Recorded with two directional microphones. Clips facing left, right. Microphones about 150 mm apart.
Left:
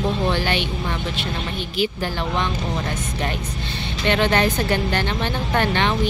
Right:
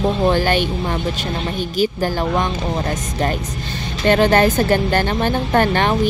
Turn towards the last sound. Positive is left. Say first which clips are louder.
# right 4 dB
turn(degrees=-45)  # may be behind; listen again after turning